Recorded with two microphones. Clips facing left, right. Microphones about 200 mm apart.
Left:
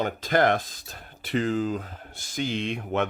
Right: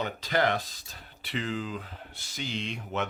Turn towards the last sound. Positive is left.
turn(degrees=55)  # may be behind; listen again after turning